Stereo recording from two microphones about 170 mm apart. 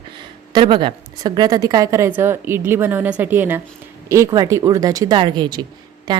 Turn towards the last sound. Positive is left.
turn(degrees=-25)  # may be behind; listen again after turning